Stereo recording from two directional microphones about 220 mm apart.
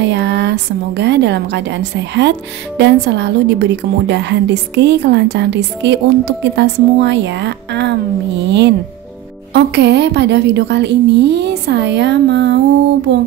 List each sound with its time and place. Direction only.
0.0 s a woman's voice: 50° right (ahead or behind)
13.1 s music: 55° right (ahead or behind)